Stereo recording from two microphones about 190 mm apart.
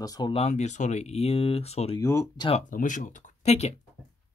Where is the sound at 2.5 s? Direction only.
45° left (ahead or behind).